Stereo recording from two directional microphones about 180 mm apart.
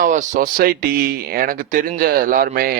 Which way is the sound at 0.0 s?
45° right (ahead or behind).